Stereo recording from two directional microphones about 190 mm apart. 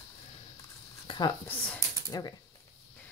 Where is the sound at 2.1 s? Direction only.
20° left (ahead or behind).